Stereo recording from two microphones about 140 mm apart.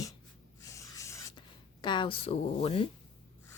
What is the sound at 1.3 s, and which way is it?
Speech, 35° left (ahead or behind).